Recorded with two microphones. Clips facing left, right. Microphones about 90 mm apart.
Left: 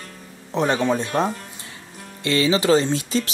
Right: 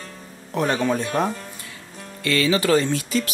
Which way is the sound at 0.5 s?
20° left (ahead or behind).